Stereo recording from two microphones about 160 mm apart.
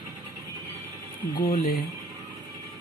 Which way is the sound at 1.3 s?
65° left (ahead or behind).